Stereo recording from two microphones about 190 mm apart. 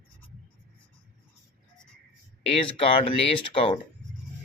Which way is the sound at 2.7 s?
30° left (ahead or behind).